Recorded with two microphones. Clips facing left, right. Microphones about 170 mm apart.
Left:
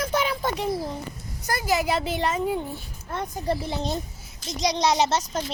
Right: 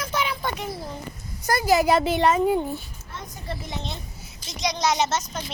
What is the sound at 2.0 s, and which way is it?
Speech, 65° right (ahead or behind).